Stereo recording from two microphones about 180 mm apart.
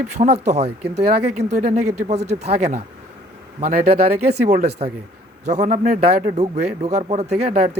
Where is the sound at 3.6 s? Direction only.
55° right (ahead or behind).